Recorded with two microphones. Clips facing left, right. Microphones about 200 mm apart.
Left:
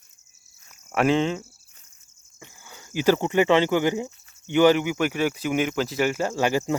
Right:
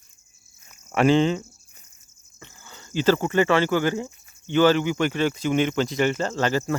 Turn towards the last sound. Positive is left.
turn(degrees=15)  # may be behind; listen again after turning